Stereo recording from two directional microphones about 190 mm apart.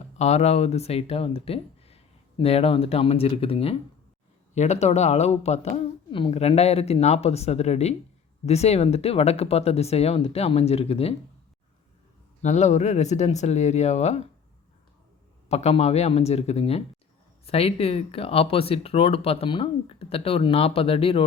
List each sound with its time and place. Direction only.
0.2 s speech: 35° left (ahead or behind)
12.4 s speech: 40° left (ahead or behind)
15.4 s speech: 35° left (ahead or behind)